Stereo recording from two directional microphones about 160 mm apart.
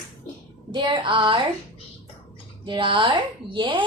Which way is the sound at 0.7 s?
30° right (ahead or behind).